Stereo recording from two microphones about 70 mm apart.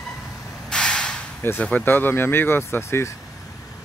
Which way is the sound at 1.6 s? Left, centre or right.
Left.